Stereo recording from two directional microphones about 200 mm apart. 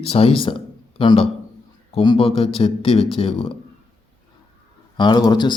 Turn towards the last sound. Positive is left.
turn(degrees=20)  # may be behind; listen again after turning